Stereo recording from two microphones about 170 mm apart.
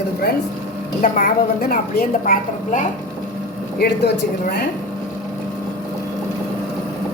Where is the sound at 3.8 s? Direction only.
75° left (ahead or behind).